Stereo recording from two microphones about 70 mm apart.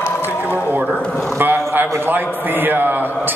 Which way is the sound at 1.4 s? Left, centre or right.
Right.